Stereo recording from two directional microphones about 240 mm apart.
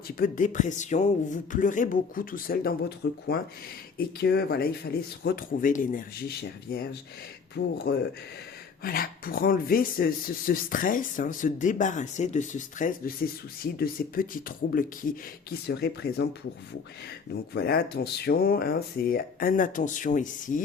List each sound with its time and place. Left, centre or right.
0.2 s speech: left
17.5 s speech: left